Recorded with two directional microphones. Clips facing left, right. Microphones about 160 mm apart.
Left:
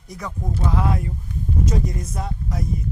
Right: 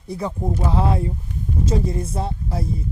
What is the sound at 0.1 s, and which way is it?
Speech, 30° right (ahead or behind).